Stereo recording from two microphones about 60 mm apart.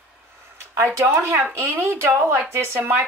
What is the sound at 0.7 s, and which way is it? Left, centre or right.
Speech, right.